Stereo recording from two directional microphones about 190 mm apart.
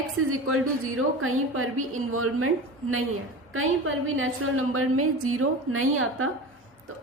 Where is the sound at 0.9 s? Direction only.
90° right.